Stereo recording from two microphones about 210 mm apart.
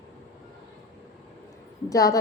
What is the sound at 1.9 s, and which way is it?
Speech, 15° left (ahead or behind).